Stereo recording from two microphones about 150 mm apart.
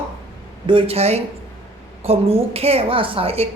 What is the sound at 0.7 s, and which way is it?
A woman's voice, 40° right (ahead or behind).